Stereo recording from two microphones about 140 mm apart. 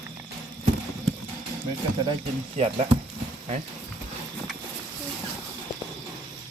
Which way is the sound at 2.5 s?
50° right (ahead or behind).